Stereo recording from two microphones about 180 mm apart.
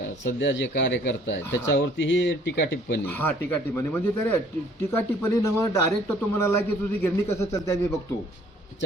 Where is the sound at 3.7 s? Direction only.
10° left (ahead or behind).